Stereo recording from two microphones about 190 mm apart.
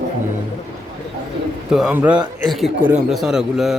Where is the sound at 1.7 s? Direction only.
5° right (ahead or behind).